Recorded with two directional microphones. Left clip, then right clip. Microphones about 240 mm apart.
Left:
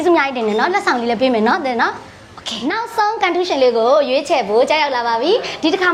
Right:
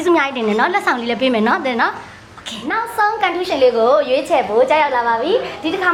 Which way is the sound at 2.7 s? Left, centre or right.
Left.